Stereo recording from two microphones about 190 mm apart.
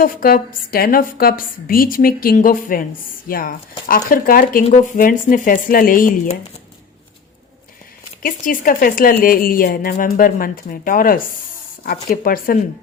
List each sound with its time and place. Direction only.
0.0 s a woman's voice: 50° left (ahead or behind)
8.2 s a woman's voice: 45° left (ahead or behind)